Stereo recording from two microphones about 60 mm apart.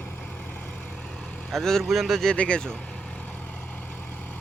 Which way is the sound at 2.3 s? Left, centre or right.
Centre.